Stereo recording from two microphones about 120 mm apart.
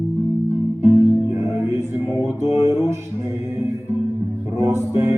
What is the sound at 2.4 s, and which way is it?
Music, 25° right (ahead or behind).